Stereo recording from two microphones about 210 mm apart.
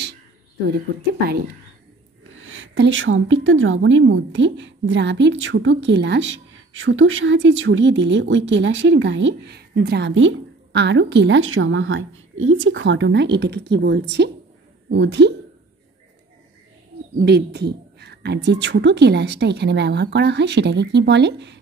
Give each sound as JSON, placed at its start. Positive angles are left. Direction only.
{"t": 2.3, "sound": "a woman's voice", "side_deg": -70}
{"t": 17.2, "sound": "a woman's voice", "side_deg": -50}